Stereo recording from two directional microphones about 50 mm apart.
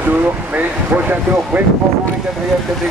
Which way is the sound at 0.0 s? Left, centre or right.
Right.